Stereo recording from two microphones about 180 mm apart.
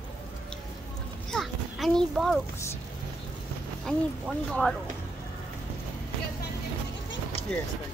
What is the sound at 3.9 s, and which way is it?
Speech, 5° left (ahead or behind).